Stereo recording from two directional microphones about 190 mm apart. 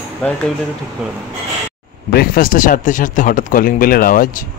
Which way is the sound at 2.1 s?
50° left (ahead or behind).